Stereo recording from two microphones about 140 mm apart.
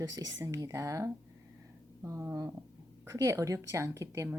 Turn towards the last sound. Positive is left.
turn(degrees=-20)  # may be behind; listen again after turning